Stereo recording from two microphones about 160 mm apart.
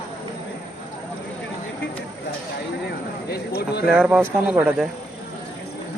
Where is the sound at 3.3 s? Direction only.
80° left.